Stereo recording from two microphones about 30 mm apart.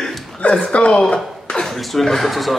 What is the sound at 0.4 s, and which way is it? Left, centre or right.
Speech, left.